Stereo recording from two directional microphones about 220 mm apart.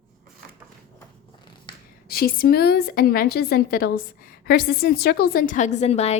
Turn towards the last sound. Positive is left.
turn(degrees=30)  # may be behind; listen again after turning